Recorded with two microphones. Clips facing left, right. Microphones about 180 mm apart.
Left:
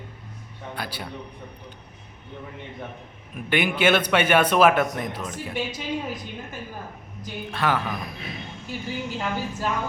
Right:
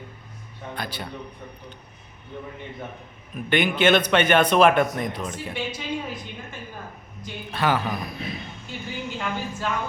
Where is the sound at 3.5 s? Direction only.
10° left (ahead or behind).